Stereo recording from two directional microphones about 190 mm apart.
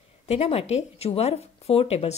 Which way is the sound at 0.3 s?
30° left (ahead or behind).